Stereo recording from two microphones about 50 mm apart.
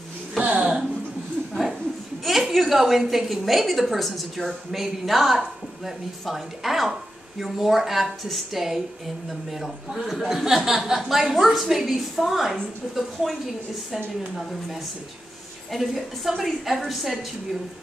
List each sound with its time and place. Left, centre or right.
0.4 s a sound: right
2.2 s a woman's voice: centre
15.7 s a woman's voice: centre